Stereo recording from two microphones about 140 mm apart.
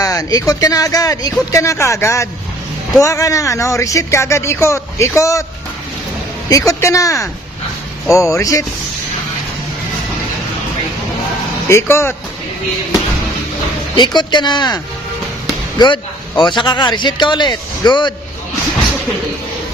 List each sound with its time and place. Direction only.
0.0 s speech: 25° left (ahead or behind)
6.5 s speech: 25° left (ahead or behind)
11.7 s speech: 20° left (ahead or behind)
13.9 s a man's voice: 30° left (ahead or behind)
15.8 s a man's voice: 30° left (ahead or behind)